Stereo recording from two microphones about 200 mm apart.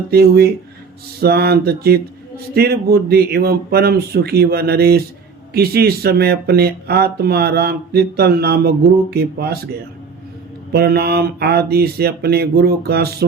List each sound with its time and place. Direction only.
0.1 s speech: 50° right (ahead or behind)
10.7 s speech: 50° right (ahead or behind)